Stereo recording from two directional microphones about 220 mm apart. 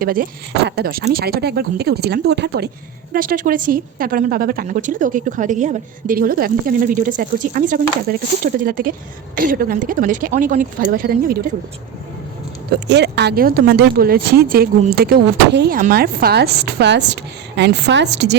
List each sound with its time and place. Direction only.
0.0 s speech: 40° right (ahead or behind)
12.7 s speech: 50° right (ahead or behind)